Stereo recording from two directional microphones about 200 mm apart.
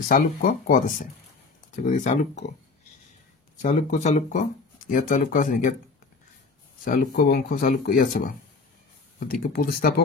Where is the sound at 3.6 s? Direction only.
35° left (ahead or behind).